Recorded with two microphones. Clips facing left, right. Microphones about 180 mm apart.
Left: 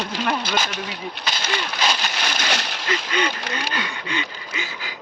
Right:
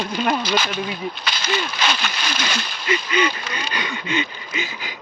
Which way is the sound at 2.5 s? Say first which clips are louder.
Left 2 dB; 70° left (ahead or behind).